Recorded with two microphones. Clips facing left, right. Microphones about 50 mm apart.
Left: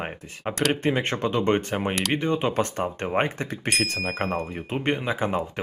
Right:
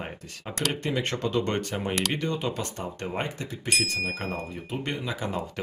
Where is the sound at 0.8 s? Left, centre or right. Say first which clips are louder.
Left 4 dB; left.